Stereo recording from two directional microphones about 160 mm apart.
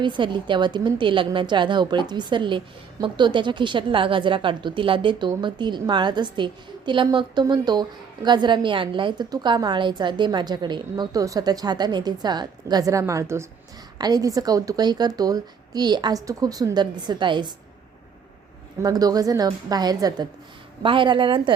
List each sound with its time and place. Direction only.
0.0 s a woman's voice: 30° right (ahead or behind)
18.8 s a woman's voice: 25° right (ahead or behind)